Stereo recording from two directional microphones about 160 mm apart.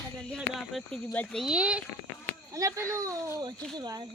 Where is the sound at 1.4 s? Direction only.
5° right (ahead or behind).